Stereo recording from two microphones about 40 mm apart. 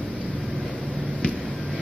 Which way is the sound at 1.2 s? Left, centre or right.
Left.